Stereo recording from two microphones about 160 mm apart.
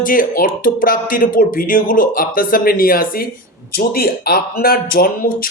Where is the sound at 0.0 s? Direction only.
60° left (ahead or behind).